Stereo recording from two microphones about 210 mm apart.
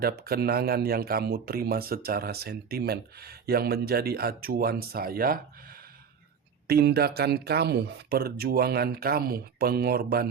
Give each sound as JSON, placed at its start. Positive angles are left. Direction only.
{"t": 0.0, "sound": "speech", "side_deg": -45}
{"t": 6.7, "sound": "speech", "side_deg": -50}